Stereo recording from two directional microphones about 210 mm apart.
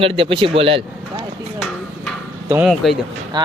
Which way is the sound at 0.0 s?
25° right (ahead or behind).